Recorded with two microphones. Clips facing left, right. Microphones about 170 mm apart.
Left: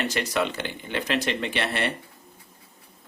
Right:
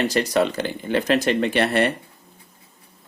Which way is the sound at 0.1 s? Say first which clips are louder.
Right 6 dB; 35° right (ahead or behind).